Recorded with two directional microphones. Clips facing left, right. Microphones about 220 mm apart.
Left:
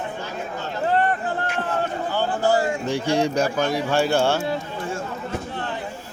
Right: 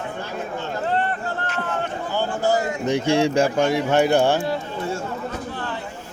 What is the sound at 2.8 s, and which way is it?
Speech, 20° right (ahead or behind).